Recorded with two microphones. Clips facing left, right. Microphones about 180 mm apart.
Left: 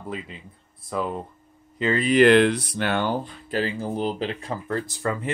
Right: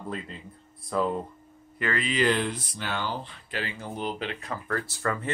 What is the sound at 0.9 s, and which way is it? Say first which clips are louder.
Speech: right 1 dB; 10° left (ahead or behind).